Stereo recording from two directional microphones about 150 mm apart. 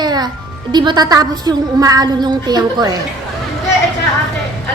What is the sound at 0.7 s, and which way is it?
Speech, 30° right (ahead or behind).